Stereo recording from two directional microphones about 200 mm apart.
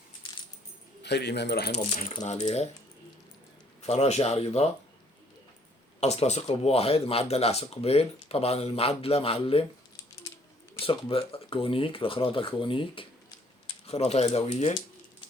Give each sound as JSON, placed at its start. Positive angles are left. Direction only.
{"t": 1.0, "sound": "speech", "side_deg": 55}
{"t": 1.7, "sound": "speech", "side_deg": 35}
{"t": 3.8, "sound": "speech", "side_deg": 30}
{"t": 6.0, "sound": "speech", "side_deg": 35}
{"t": 10.8, "sound": "speech", "side_deg": 25}